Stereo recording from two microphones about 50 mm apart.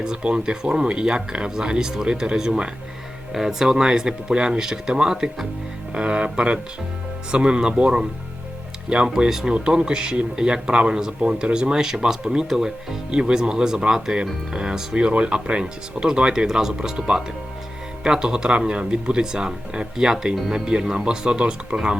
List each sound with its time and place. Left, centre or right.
0.0 s speech: centre
11.7 s speech: centre